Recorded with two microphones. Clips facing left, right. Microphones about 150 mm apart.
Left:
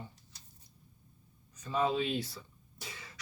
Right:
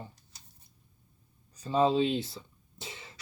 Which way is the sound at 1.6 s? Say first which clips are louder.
Right 6 dB; 30° right (ahead or behind).